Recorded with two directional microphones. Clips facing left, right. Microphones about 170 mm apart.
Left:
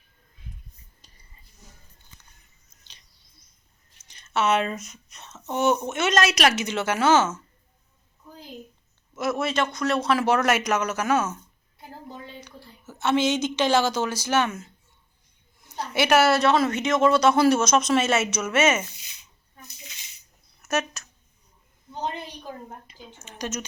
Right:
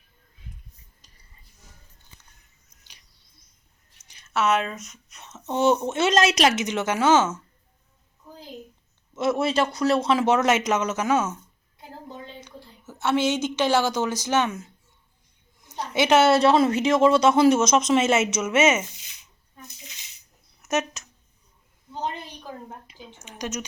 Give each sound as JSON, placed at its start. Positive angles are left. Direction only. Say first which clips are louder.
{"t": 4.1, "sound": "speech", "louder": "even", "side_deg": -5}
{"t": 5.2, "sound": "a woman's voice", "louder": "right 2 dB", "side_deg": -20}
{"t": 9.1, "sound": "a woman's voice", "louder": "right 3 dB", "side_deg": -30}
{"t": 20.6, "sound": "a sound", "louder": "right 1 dB", "side_deg": -20}
{"t": 23.1, "sound": "speech", "louder": "even", "side_deg": -15}